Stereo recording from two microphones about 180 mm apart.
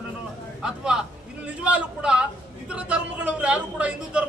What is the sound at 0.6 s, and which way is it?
A man's voice, 5° right (ahead or behind).